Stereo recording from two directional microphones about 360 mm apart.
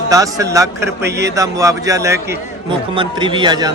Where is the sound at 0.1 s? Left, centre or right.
Centre.